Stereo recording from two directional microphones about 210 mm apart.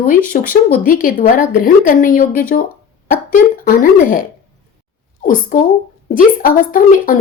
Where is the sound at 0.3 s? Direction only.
40° left (ahead or behind).